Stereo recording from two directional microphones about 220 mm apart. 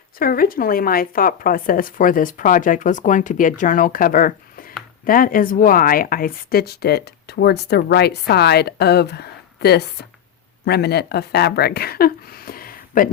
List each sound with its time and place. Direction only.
0.2 s speech: 40° left (ahead or behind)